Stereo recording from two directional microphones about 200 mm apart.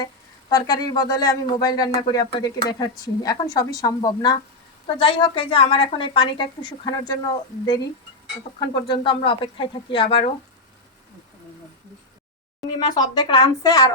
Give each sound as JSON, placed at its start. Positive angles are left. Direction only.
{"t": 0.5, "sound": "a woman's voice", "side_deg": 20}
{"t": 12.8, "sound": "a woman's voice", "side_deg": 20}